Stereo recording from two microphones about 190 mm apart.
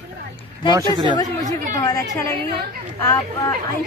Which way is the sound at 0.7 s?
20° right (ahead or behind).